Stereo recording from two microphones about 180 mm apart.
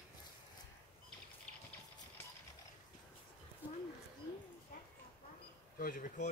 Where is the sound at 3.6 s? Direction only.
10° right (ahead or behind).